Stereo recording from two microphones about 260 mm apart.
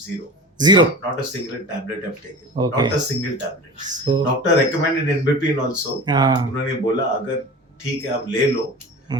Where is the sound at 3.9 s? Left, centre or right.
Centre.